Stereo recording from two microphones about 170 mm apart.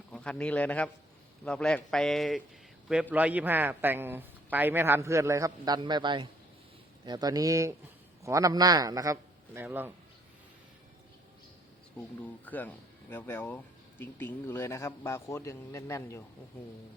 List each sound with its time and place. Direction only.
0.1 s a man's voice: 5° left (ahead or behind); by 9.1 s 20° right (ahead or behind)
9.6 s a man's voice: 10° right (ahead or behind)
12.2 s a man's voice: 10° left (ahead or behind)